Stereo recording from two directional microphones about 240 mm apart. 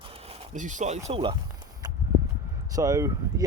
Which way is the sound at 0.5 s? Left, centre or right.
Right.